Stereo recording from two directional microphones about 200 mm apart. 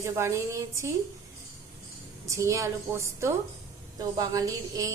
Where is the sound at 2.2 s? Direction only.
15° right (ahead or behind).